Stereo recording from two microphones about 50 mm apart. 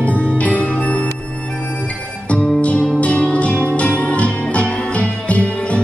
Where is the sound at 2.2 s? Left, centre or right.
Left.